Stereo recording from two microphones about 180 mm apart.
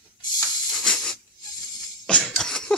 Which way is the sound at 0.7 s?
Centre (ahead or behind).